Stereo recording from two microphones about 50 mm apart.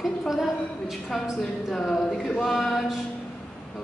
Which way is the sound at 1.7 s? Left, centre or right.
Centre.